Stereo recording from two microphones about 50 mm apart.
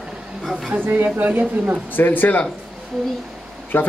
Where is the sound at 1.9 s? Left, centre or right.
Left.